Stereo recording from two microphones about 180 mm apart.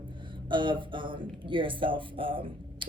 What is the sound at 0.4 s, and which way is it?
Speech, 25° right (ahead or behind).